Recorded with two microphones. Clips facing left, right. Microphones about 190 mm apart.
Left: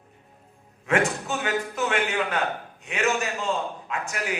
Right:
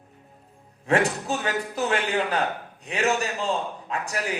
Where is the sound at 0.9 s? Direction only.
35° right (ahead or behind).